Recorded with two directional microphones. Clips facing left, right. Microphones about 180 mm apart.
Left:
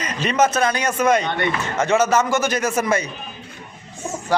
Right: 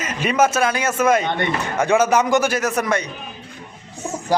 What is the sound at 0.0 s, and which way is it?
Speech, 5° right (ahead or behind).